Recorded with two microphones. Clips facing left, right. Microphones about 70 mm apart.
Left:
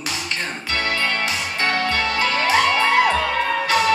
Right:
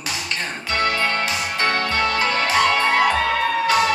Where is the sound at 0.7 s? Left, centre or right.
Right.